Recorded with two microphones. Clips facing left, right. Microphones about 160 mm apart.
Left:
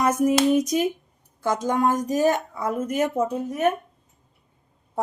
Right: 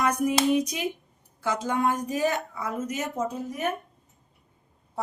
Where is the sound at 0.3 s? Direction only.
45° left (ahead or behind).